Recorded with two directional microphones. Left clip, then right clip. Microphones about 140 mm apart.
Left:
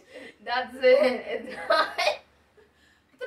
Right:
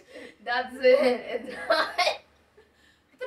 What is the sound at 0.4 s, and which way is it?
A woman's voice, 20° right (ahead or behind).